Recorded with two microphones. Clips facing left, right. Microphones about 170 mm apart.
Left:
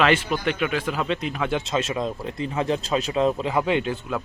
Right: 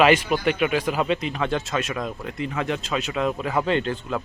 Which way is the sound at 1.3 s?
10° left (ahead or behind).